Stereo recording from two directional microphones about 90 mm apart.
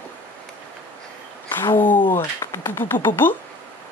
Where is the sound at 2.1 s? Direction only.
30° left (ahead or behind).